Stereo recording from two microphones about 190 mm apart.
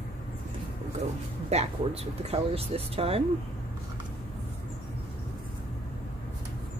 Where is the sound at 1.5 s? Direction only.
35° right (ahead or behind).